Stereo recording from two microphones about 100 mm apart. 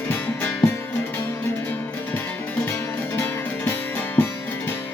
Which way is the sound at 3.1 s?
25° left (ahead or behind).